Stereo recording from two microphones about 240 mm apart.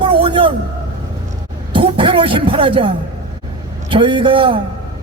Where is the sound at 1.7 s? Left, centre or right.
Right.